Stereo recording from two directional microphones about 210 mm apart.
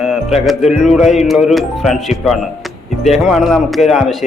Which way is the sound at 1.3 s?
Centre (ahead or behind).